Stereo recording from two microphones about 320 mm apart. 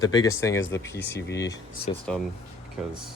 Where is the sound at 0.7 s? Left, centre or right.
Left.